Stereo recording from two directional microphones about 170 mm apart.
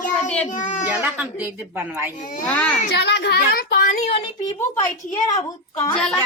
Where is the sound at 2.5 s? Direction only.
5° left (ahead or behind).